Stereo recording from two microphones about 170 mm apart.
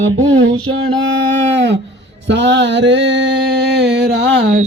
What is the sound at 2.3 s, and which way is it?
Mantra, 90° right.